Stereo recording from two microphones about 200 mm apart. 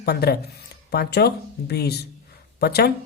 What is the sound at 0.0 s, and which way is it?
Speech, 50° left (ahead or behind).